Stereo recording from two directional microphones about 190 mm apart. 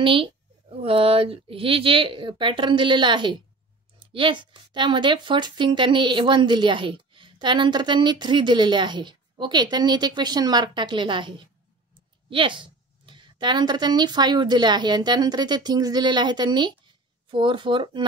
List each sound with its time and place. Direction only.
0.0 s speech: 25° right (ahead or behind)